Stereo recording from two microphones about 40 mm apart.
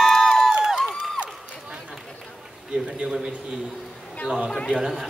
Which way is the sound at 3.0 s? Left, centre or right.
Right.